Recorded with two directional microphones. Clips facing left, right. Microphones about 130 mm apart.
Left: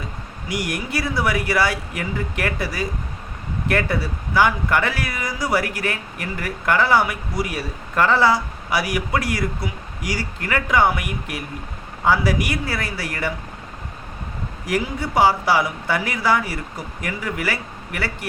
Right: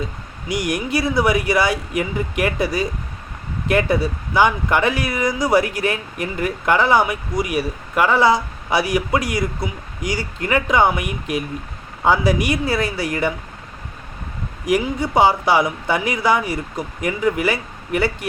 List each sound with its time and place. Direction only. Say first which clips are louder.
0.4 s speech: right 4 dB; 20° right (ahead or behind)
14.6 s speech: right 5 dB; 20° right (ahead or behind)